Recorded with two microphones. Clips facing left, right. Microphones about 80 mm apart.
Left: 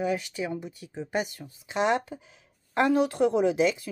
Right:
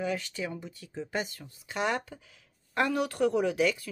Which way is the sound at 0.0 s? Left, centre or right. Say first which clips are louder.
Left 4 dB; centre.